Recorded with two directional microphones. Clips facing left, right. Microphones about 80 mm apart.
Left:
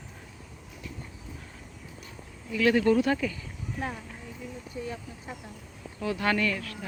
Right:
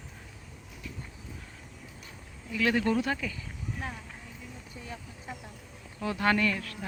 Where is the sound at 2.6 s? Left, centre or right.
Right.